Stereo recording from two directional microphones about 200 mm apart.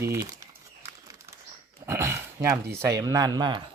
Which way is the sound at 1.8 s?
15° right (ahead or behind).